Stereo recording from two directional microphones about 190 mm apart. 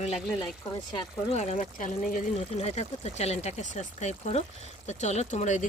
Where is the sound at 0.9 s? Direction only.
35° left (ahead or behind).